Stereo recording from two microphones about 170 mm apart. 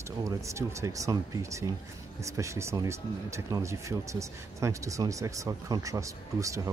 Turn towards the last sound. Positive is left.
turn(degrees=-20)  # may be behind; listen again after turning